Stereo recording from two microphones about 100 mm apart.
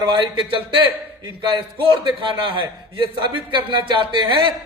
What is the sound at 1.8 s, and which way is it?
A man's voice, 55° right (ahead or behind).